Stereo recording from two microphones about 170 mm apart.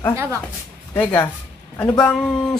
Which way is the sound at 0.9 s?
15° left (ahead or behind).